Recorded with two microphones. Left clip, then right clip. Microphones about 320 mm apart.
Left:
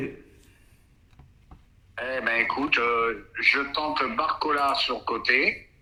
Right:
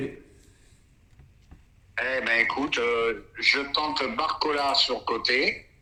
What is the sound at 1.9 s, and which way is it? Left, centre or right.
A man's voice, centre.